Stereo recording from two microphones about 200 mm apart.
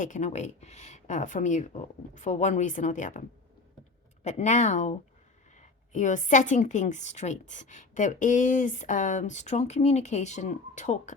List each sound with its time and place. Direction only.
0.0 s a woman's voice: 35° left (ahead or behind)